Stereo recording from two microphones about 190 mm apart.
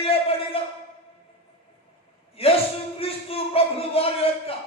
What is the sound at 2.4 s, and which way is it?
Speech, 30° left (ahead or behind).